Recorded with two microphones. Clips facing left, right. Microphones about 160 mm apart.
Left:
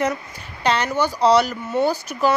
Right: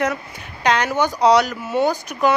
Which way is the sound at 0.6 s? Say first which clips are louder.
Right 2 dB; 15° right (ahead or behind).